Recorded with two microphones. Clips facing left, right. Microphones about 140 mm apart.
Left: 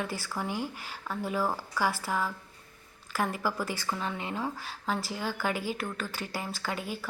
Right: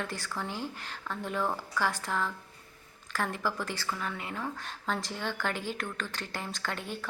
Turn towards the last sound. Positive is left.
turn(degrees=5)  # may be behind; listen again after turning